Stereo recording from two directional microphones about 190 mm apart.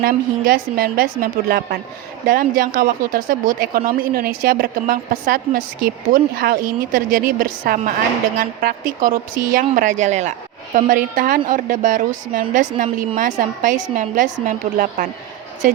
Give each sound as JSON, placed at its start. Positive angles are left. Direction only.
{"t": 0.0, "sound": "speech", "side_deg": -50}